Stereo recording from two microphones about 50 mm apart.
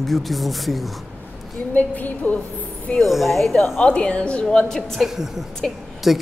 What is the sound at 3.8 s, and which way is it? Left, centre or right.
Speech, left.